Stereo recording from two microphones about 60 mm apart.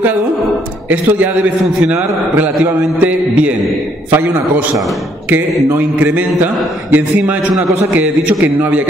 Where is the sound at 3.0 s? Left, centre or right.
Right.